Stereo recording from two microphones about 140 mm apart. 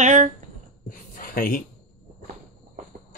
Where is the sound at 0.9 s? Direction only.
90° left.